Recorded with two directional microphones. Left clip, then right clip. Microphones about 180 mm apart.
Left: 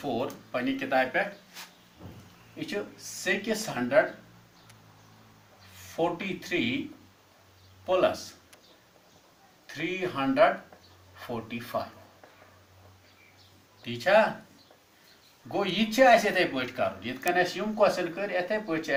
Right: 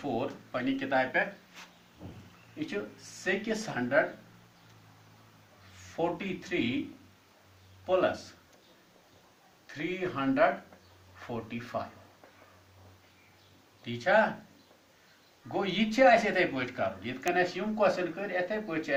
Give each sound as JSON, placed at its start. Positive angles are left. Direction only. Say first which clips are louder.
{"t": 0.0, "sound": "speech", "louder": "left 2 dB", "side_deg": 30}
{"t": 2.6, "sound": "speech", "louder": "left 2 dB", "side_deg": 35}
{"t": 3.2, "sound": "speech", "louder": "left 3 dB", "side_deg": 20}
{"t": 6.0, "sound": "speech", "louder": "left 3 dB", "side_deg": 30}
{"t": 7.9, "sound": "speech", "louder": "left 3 dB", "side_deg": 25}
{"t": 9.6, "sound": "speech", "louder": "left 3 dB", "side_deg": 25}
{"t": 13.8, "sound": "speech", "louder": "left 3 dB", "side_deg": 25}
{"t": 15.5, "sound": "speech", "louder": "left 3 dB", "side_deg": 25}